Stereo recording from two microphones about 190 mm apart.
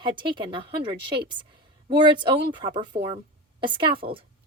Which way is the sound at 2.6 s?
25° right (ahead or behind).